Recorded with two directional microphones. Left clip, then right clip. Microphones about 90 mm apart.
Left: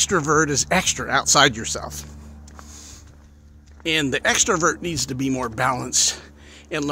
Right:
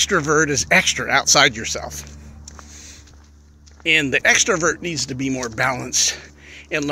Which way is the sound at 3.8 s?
30° left (ahead or behind).